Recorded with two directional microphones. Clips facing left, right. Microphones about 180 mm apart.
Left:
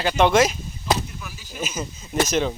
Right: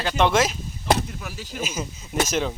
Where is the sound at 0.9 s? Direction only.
70° right (ahead or behind).